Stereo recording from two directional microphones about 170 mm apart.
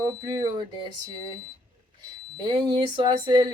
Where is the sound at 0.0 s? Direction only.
25° right (ahead or behind).